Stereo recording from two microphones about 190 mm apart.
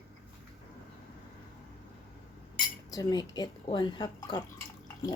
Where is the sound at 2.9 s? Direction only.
20° left (ahead or behind).